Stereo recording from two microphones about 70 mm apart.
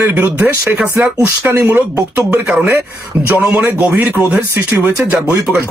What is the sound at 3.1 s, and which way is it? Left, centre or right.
Speech, right.